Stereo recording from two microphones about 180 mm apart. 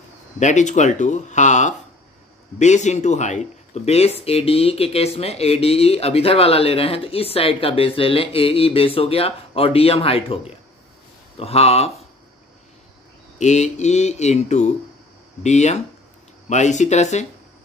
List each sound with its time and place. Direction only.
0.4 s speech: 40° left (ahead or behind)
13.4 s speech: 40° left (ahead or behind)